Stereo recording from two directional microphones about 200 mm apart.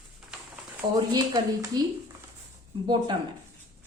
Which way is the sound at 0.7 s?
15° right (ahead or behind).